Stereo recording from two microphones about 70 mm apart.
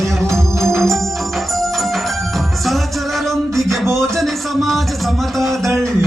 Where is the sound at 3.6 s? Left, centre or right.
Right.